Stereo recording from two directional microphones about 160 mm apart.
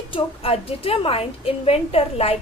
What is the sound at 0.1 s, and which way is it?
A woman's voice, 35° left (ahead or behind).